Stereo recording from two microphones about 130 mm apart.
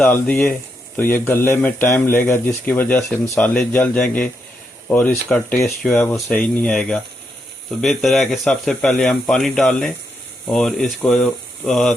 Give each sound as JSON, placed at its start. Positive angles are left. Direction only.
{"t": 0.0, "sound": "speech", "side_deg": 10}